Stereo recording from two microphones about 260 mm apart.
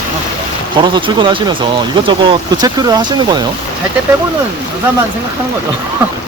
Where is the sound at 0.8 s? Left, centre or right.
Centre.